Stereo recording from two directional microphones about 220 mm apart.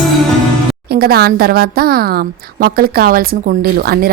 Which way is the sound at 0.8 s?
45° right (ahead or behind).